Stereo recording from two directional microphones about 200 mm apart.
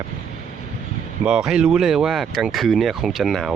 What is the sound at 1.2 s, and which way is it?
Speech, 5° right (ahead or behind).